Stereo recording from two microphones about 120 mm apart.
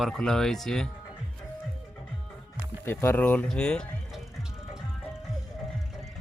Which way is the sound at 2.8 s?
20° left (ahead or behind).